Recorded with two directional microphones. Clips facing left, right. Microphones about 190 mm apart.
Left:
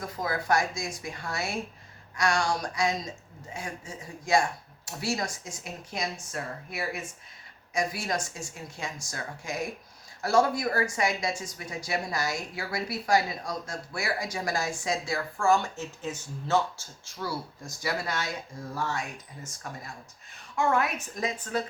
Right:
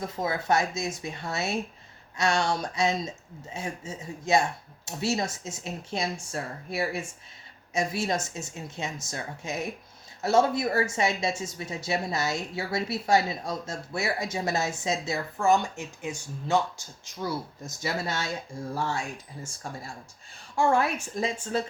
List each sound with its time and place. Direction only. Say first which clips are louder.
0.0 s speech: right 2 dB; 25° right (ahead or behind)